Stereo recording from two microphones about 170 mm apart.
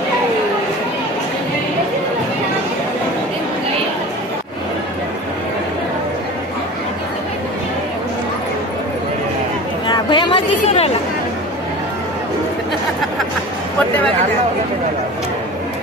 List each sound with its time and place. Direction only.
9.8 s chatter: 25° left (ahead or behind)